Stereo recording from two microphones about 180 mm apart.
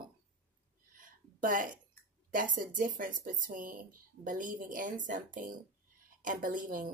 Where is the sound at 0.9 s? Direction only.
50° right (ahead or behind).